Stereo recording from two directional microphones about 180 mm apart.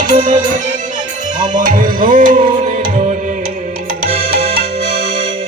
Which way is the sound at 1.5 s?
50° right (ahead or behind).